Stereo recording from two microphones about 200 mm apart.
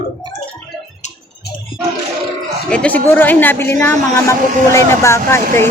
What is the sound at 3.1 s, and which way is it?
Speech, 10° left (ahead or behind).